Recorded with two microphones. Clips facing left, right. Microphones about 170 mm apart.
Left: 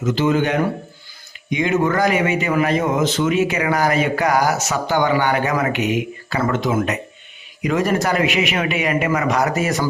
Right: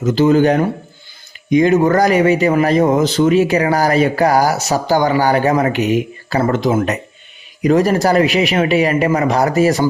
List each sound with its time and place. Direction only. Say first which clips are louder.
0.0 s speech: right 6 dB; 35° right (ahead or behind)